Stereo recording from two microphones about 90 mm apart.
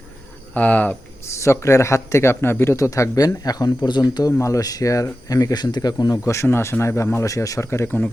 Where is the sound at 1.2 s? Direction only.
30° left (ahead or behind).